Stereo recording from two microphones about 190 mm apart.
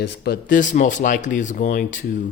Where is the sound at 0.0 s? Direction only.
60° left (ahead or behind).